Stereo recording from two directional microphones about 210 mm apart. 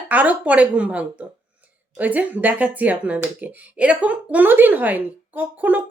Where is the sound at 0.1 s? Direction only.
10° right (ahead or behind).